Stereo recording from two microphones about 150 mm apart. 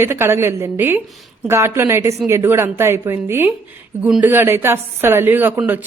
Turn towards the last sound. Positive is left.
turn(degrees=-10)  # may be behind; listen again after turning